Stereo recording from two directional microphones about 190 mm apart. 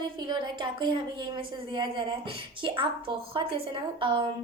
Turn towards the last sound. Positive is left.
turn(degrees=-25)  # may be behind; listen again after turning